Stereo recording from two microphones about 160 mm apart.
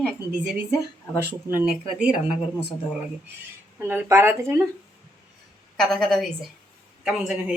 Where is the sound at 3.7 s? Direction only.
15° right (ahead or behind).